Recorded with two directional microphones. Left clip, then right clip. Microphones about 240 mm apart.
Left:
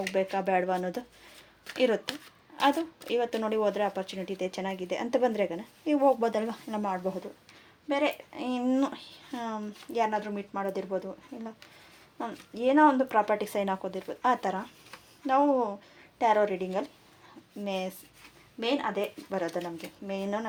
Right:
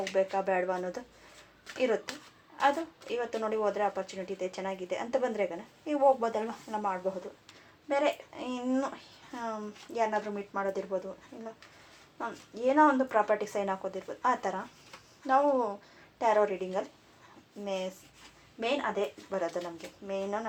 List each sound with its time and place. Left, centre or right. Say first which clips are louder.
0.0 s speech: even; left